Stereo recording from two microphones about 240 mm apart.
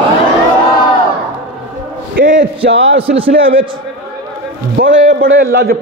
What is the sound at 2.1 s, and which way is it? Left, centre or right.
A man's voice, right.